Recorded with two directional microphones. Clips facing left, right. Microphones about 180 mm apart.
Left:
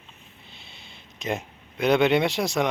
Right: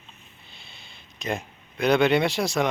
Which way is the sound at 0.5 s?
25° left (ahead or behind).